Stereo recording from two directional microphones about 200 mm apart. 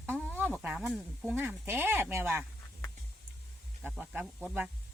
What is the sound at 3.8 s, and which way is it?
Speech, 10° right (ahead or behind).